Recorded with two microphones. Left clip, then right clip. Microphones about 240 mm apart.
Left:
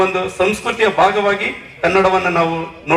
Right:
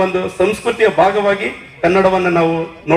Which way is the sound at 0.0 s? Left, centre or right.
Left.